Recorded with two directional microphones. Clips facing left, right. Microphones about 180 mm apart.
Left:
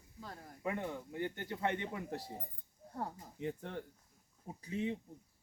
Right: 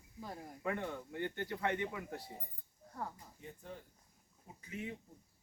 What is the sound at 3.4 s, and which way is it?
Speech, 80° left.